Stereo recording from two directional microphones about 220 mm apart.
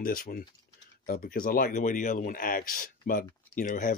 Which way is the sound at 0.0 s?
40° left (ahead or behind).